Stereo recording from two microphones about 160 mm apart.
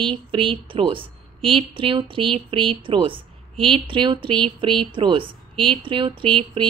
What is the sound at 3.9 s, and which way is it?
A woman's voice, 30° right (ahead or behind).